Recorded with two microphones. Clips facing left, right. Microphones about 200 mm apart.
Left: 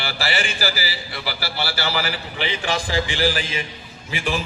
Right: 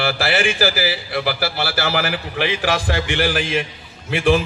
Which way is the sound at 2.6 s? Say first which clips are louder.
Right 3 dB; 65° right (ahead or behind).